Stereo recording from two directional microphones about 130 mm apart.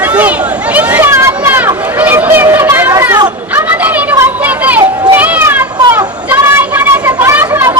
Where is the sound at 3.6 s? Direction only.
10° right (ahead or behind).